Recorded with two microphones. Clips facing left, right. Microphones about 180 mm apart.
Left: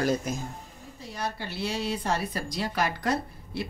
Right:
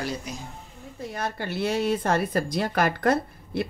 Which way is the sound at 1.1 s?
55° right (ahead or behind).